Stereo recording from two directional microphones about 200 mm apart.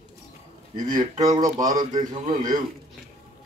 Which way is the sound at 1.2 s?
15° right (ahead or behind).